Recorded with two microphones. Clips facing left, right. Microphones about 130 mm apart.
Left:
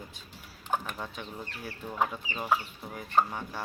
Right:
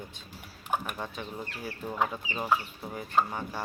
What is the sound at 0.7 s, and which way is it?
Speech, 10° right (ahead or behind).